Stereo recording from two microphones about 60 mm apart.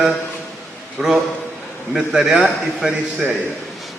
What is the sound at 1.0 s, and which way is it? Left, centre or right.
A man's voice, centre.